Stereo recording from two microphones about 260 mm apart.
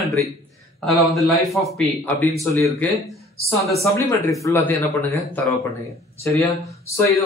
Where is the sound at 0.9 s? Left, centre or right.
Centre.